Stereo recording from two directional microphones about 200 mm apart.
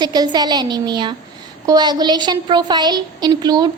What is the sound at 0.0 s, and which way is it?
A woman's voice, 20° right (ahead or behind).